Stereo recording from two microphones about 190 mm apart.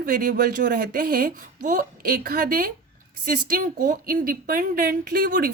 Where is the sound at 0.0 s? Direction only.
45° right (ahead or behind).